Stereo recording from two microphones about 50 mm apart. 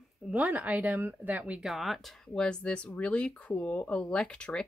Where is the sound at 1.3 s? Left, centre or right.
Right.